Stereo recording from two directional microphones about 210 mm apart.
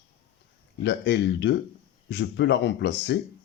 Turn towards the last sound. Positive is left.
turn(degrees=55)  # may be behind; listen again after turning